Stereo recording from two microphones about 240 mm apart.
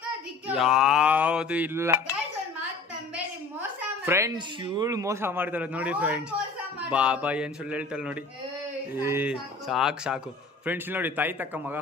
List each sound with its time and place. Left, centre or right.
0.5 s speech: centre
4.0 s a man's voice: centre